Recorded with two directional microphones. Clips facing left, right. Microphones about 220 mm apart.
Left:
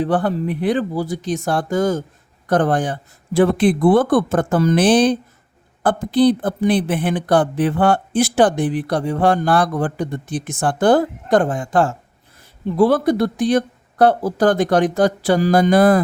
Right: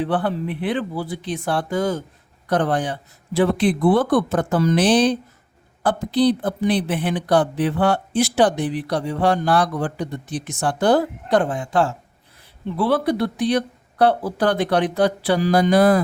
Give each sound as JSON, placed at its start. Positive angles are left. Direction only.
{"t": 0.0, "sound": "a woman's voice", "side_deg": 45}